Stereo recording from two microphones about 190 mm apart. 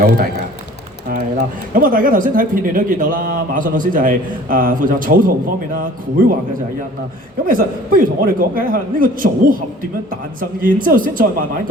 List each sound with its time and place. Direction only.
1.7 s speech: 45° right (ahead or behind)
7.4 s speech: 50° right (ahead or behind)